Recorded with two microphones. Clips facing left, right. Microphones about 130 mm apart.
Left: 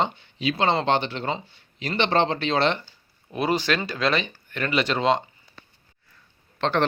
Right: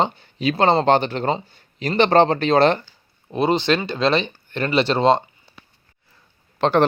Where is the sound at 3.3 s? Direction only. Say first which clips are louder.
Right 5 dB; 25° right (ahead or behind).